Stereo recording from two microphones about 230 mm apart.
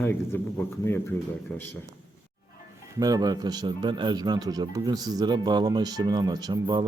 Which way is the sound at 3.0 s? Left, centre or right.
Centre.